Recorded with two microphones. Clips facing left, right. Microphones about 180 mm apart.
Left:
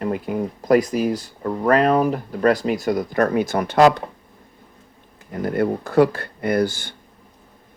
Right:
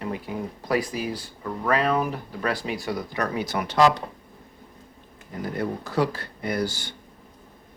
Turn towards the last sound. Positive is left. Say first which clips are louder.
# left 7 dB
turn(degrees=55)  # may be behind; listen again after turning